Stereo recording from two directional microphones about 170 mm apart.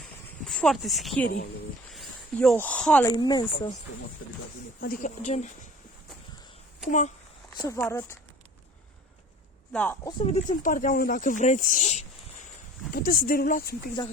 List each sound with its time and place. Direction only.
0.4 s speech: centre (ahead or behind)
3.1 s speech: 25° left (ahead or behind)
4.8 s speech: 55° left (ahead or behind)
6.8 s speech: 45° left (ahead or behind)
7.5 s speech: 20° left (ahead or behind)
9.7 s speech: 10° left (ahead or behind)
10.2 s speech: 45° left (ahead or behind)
12.9 s speech: 60° left (ahead or behind)